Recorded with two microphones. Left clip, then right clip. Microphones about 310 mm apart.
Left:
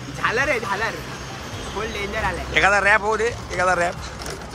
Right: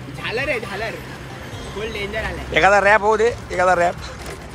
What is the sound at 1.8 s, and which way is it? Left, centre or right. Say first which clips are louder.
Speech: even; left.